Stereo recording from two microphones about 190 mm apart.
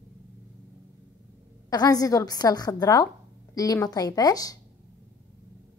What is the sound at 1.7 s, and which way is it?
A woman's voice, 20° left (ahead or behind).